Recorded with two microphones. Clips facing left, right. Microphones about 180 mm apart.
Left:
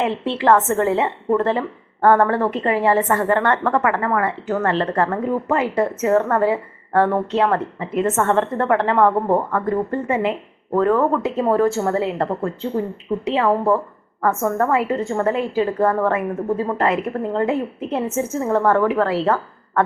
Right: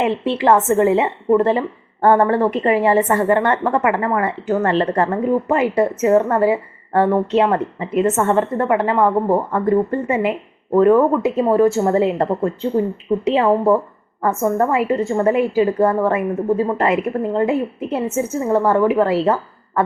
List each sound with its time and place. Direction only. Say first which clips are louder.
0.0 s a woman's voice: right 2 dB; 15° right (ahead or behind)